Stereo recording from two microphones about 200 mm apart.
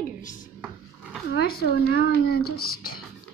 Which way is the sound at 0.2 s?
40° left (ahead or behind).